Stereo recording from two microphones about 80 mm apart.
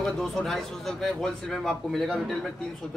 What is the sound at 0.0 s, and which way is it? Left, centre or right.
Speech, centre.